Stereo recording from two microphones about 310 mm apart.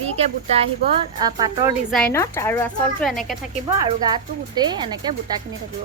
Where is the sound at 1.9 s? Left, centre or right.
Centre.